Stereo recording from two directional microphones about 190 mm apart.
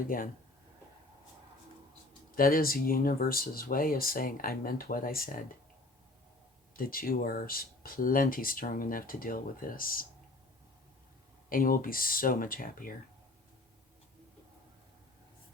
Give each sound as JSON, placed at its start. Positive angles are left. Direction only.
{"t": 0.1, "sound": "speech", "side_deg": 45}
{"t": 2.3, "sound": "speech", "side_deg": 50}
{"t": 6.7, "sound": "speech", "side_deg": 50}
{"t": 11.4, "sound": "speech", "side_deg": 50}